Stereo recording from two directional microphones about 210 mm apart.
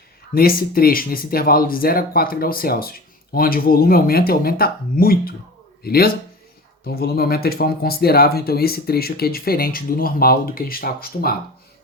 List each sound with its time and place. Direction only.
0.3 s speech: 45° left (ahead or behind)